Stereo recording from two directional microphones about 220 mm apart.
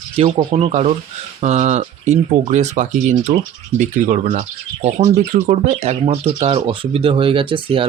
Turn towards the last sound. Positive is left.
turn(degrees=-25)  # may be behind; listen again after turning